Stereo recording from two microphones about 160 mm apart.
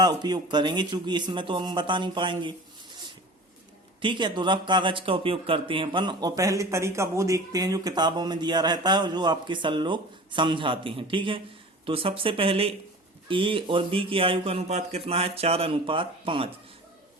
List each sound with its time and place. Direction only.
0.0 s speech: 25° right (ahead or behind)
4.0 s speech: 30° right (ahead or behind)